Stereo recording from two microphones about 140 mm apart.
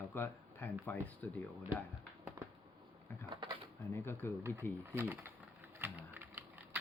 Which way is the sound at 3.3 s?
35° right (ahead or behind).